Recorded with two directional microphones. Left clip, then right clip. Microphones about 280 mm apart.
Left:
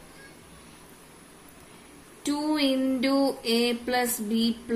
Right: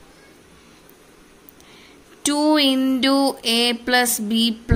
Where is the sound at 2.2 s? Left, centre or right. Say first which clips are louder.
Right 9 dB; right.